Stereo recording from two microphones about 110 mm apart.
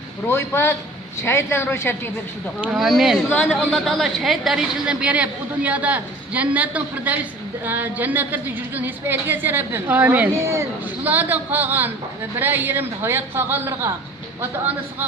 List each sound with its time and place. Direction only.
0.3 s a woman's voice: 25° left (ahead or behind)
2.7 s a woman's voice: centre (ahead or behind); by 13.9 s 20° right (ahead or behind)